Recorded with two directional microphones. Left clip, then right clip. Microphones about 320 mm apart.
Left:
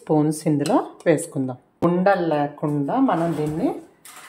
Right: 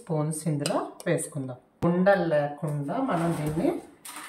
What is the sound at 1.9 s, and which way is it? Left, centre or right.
Speech, centre.